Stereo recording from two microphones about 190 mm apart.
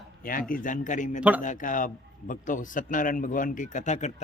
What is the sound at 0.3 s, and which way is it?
A man's voice, 45° left (ahead or behind).